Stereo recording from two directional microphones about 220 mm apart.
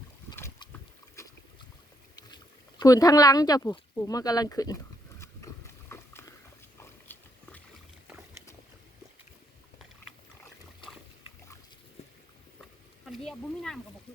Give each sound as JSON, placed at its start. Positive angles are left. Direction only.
{"t": 0.3, "sound": "boat", "side_deg": 15}
{"t": 2.1, "sound": "speech", "side_deg": 20}
{"t": 5.2, "sound": "horse", "side_deg": 10}
{"t": 13.1, "sound": "a sound", "side_deg": 0}